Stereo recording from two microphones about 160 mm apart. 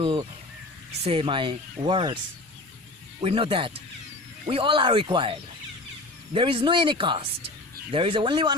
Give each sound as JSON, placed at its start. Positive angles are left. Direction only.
{"t": 1.0, "sound": "speech", "side_deg": -35}
{"t": 3.2, "sound": "speech", "side_deg": -35}